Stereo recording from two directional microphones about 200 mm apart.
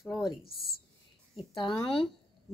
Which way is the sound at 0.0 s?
Centre (ahead or behind).